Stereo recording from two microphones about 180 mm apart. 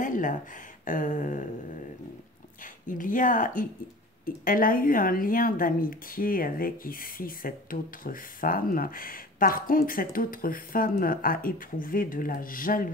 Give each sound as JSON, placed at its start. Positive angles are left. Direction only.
{"t": 0.0, "sound": "a sound", "side_deg": 45}
{"t": 0.8, "sound": "a woman's voice", "side_deg": 45}
{"t": 2.6, "sound": "a woman's voice", "side_deg": 50}